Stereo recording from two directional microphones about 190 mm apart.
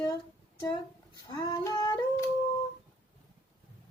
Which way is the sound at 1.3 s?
20° left (ahead or behind).